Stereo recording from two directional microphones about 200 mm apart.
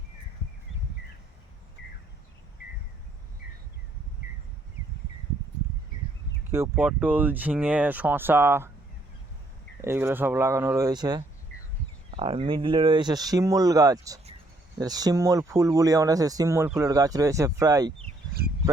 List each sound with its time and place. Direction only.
6.5 s speech: 10° right (ahead or behind)
9.8 s speech: 10° right (ahead or behind)